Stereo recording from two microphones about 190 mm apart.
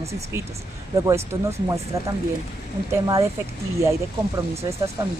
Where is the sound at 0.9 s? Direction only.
15° right (ahead or behind).